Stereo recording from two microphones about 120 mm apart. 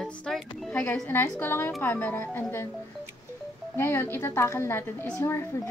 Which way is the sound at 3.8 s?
20° left (ahead or behind).